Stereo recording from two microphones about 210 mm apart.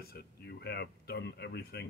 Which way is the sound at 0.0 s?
50° left (ahead or behind).